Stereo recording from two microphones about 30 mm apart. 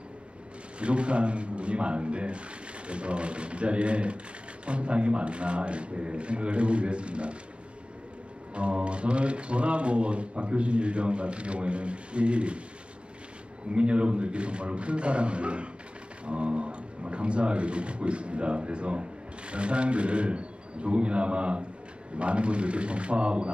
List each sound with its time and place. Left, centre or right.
0.7 s speech: right
8.5 s speech: right
13.7 s speech: right